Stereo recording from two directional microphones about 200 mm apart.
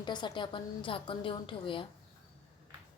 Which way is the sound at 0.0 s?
20° left (ahead or behind).